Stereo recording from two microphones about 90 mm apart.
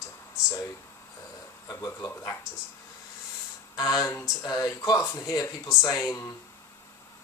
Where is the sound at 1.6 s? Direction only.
45° left (ahead or behind).